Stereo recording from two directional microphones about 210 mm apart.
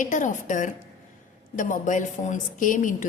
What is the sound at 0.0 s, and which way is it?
A woman's voice, 35° left (ahead or behind).